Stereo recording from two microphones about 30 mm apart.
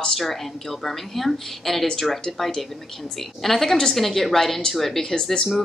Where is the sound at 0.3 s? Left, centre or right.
Centre.